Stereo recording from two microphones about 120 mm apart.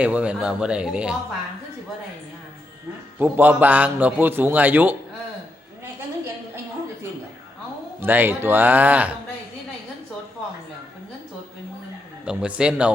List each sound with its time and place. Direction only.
0.0 s a man's voice: 10° right (ahead or behind)
3.2 s a man's voice: 15° right (ahead or behind)
8.0 s a man's voice: 15° right (ahead or behind)
12.2 s a man's voice: 10° right (ahead or behind)